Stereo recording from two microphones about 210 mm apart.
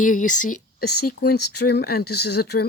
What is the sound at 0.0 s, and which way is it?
Speech, 40° left (ahead or behind).